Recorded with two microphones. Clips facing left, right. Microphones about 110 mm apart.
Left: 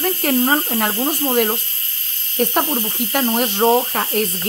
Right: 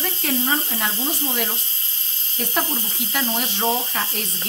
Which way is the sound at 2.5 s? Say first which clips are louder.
Left 6 dB; 60° left (ahead or behind).